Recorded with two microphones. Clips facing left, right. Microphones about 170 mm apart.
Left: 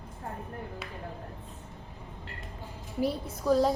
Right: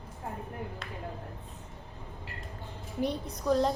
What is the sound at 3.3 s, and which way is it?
Speech, centre (ahead or behind).